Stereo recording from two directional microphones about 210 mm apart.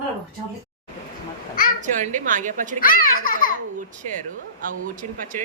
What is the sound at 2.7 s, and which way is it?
Speech, 40° left (ahead or behind).